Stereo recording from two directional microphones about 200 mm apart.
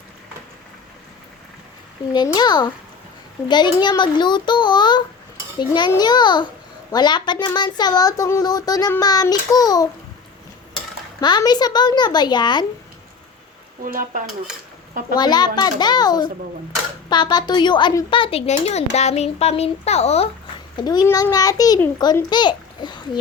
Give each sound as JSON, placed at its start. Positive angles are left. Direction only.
{"t": 2.1, "sound": "speech", "side_deg": 20}
{"t": 11.2, "sound": "speech", "side_deg": 20}
{"t": 13.8, "sound": "speech", "side_deg": -45}
{"t": 15.1, "sound": "a woman's voice", "side_deg": 20}
{"t": 20.7, "sound": "speech", "side_deg": 20}